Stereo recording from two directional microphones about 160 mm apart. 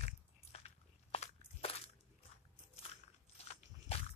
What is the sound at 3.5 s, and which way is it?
Biting, 40° left (ahead or behind).